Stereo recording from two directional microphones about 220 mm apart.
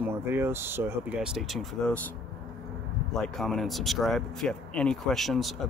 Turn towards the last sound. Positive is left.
turn(degrees=0)  # may be behind; listen again after turning